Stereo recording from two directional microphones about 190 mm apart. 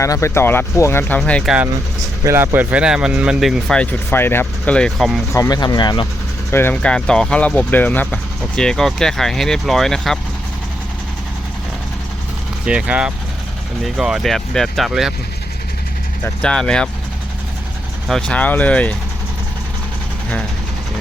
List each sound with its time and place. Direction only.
0.0 s speech: 15° left (ahead or behind)
2.2 s speech: 15° right (ahead or behind)
5.3 s speech: 20° left (ahead or behind)
6.5 s speech: 10° left (ahead or behind)
12.6 s speech: 5° right (ahead or behind)
16.4 s speech: 5° left (ahead or behind)
18.1 s speech: 5° left (ahead or behind)